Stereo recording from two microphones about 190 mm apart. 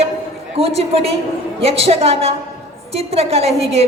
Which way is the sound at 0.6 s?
30° right (ahead or behind).